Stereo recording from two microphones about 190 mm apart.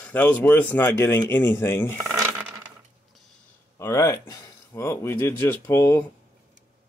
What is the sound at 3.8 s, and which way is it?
Speech, 15° left (ahead or behind).